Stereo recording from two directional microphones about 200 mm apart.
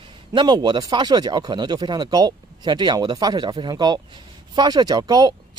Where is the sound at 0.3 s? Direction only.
20° right (ahead or behind).